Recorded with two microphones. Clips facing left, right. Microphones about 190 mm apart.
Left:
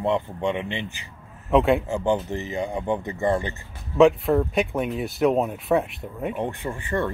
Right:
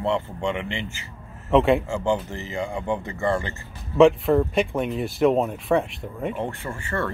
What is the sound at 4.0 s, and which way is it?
Speech, centre (ahead or behind).